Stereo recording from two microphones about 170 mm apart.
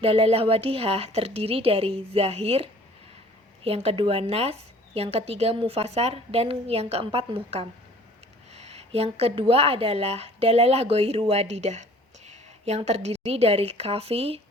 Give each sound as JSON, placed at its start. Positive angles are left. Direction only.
{"t": 0.0, "sound": "a woman's voice", "side_deg": -35}